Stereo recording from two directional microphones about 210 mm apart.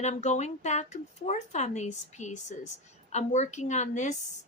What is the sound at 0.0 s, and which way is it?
Speech, 35° left (ahead or behind).